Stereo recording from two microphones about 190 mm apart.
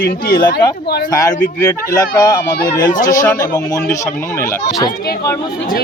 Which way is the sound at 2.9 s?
45° left (ahead or behind).